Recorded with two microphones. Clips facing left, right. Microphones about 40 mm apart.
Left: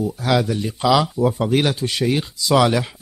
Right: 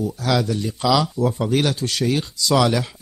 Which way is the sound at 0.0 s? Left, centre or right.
Centre.